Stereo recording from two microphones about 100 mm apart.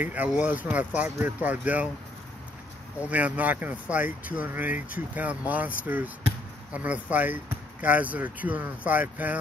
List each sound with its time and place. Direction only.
0.0 s speech: 15° right (ahead or behind)
3.1 s speech: 15° right (ahead or behind)